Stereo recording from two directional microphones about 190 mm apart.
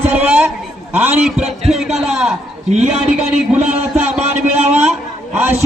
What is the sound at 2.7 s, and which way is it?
Speech, 35° right (ahead or behind).